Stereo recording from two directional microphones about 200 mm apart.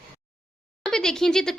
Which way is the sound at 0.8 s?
5° left (ahead or behind).